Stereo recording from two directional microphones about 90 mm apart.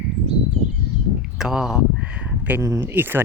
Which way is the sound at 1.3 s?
5° right (ahead or behind).